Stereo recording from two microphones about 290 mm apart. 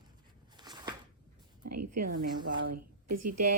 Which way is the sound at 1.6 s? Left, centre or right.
Right.